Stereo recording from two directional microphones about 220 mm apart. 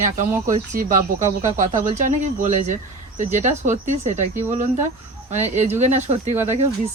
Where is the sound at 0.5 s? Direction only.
35° right (ahead or behind).